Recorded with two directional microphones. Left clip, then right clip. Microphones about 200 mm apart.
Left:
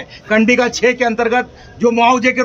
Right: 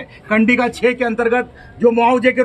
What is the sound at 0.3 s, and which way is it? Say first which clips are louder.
A man's voice: left 2 dB; 20° left (ahead or behind).